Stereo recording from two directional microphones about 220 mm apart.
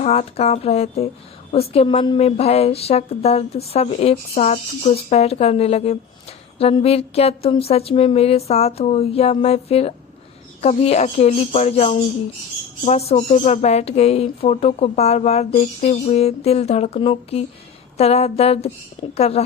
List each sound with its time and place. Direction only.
0.0 s speech: 30° left (ahead or behind)